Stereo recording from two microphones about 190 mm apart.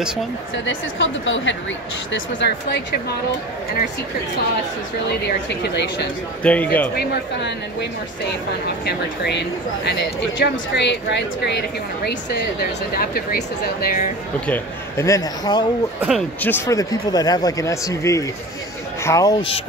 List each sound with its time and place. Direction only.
0.7 s a woman's voice: 80° left
2.1 s a woman's voice: 65° left (ahead or behind)
5.5 s a woman's voice: 65° left (ahead or behind)
6.4 s speech: 5° left (ahead or behind)
7.0 s a woman's voice: 65° left (ahead or behind)
8.8 s a woman's voice: 60° left (ahead or behind)
14.4 s speech: 10° left (ahead or behind)
16.0 s speech: 5° right (ahead or behind)
16.3 s speech: 10° left (ahead or behind)